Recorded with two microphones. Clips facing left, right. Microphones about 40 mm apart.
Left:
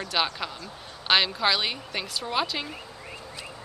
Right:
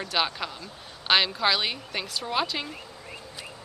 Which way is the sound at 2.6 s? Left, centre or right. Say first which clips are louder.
Left 1 dB; centre.